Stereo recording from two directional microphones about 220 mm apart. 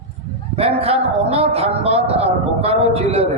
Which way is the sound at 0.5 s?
25° right (ahead or behind).